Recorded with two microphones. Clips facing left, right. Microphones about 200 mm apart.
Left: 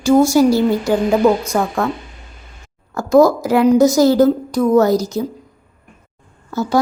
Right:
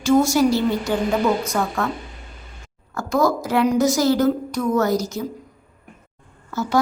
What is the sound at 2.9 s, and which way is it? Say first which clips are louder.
A woman's voice: left 8 dB; 10° left (ahead or behind).